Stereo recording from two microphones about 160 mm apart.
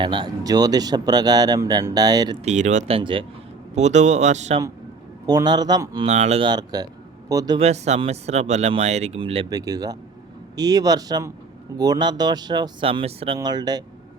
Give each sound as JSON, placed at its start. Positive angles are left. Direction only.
{"t": 0.0, "sound": "speech", "side_deg": -30}
{"t": 2.4, "sound": "speech", "side_deg": -45}
{"t": 3.8, "sound": "speech", "side_deg": -45}
{"t": 5.2, "sound": "speech", "side_deg": -25}
{"t": 6.1, "sound": "speech", "side_deg": -45}
{"t": 6.4, "sound": "speech", "side_deg": -25}
{"t": 7.6, "sound": "speech", "side_deg": -40}